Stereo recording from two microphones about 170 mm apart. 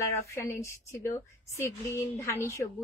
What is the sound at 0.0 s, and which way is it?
A woman's voice, 15° left (ahead or behind).